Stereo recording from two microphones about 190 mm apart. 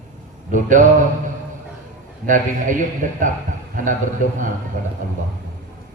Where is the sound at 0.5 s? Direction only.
45° right (ahead or behind).